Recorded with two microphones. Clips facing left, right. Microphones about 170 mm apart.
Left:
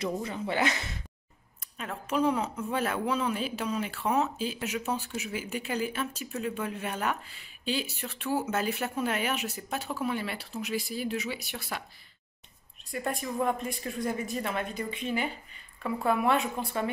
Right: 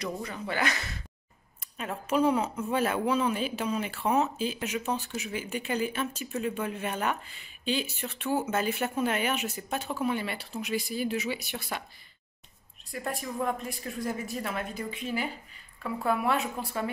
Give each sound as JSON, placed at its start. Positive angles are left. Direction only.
{"t": 0.0, "sound": "speech", "side_deg": 25}
{"t": 1.8, "sound": "a woman's voice", "side_deg": -5}
{"t": 12.9, "sound": "a woman's voice", "side_deg": 0}